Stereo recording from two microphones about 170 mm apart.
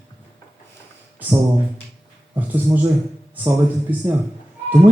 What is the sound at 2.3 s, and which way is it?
A man's voice, 10° right (ahead or behind).